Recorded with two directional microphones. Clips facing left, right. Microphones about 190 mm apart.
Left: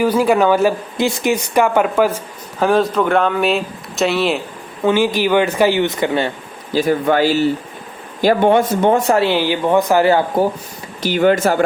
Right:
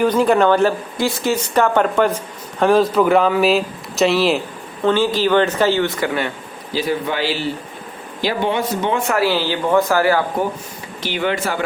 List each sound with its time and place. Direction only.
0.0 s speech: 5° left (ahead or behind)
0.9 s speech: 20° left (ahead or behind); by 4.4 s centre (ahead or behind)
4.9 s speech: 15° left (ahead or behind)
6.7 s speech: 50° left (ahead or behind)
9.2 s speech: 15° left (ahead or behind)
11.0 s speech: 45° left (ahead or behind)